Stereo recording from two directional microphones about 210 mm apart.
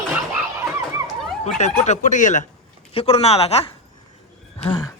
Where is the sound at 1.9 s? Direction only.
35° left (ahead or behind).